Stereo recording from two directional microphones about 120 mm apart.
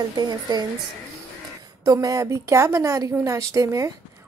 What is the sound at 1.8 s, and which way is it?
A woman's voice, 30° right (ahead or behind).